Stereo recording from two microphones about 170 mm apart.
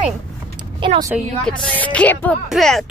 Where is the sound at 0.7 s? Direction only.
25° right (ahead or behind).